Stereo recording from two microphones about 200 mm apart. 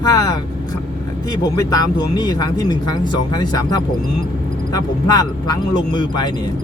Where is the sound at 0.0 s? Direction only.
20° left (ahead or behind).